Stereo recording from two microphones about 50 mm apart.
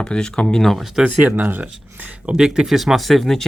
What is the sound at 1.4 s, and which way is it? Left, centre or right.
Speech, right.